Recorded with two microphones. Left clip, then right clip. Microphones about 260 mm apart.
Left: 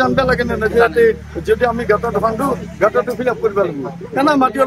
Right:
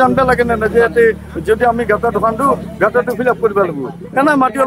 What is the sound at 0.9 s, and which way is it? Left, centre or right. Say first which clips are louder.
A man's voice: right 1 dB; right.